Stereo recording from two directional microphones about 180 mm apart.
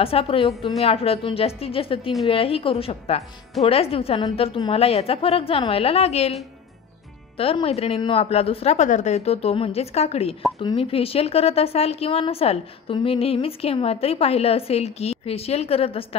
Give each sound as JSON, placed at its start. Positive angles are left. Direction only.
{"t": 0.0, "sound": "a woman's voice", "side_deg": 30}
{"t": 7.3, "sound": "a woman's voice", "side_deg": 30}